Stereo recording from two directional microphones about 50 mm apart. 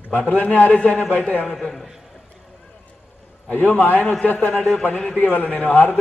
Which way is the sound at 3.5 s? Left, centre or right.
Left.